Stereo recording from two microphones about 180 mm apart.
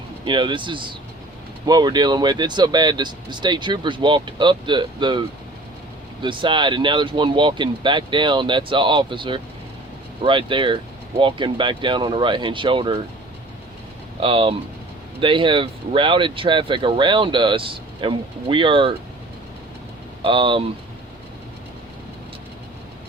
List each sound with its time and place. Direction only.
0.3 s speech: 25° right (ahead or behind)
6.2 s speech: 25° right (ahead or behind)
14.2 s speech: 30° right (ahead or behind)
20.2 s speech: 30° right (ahead or behind)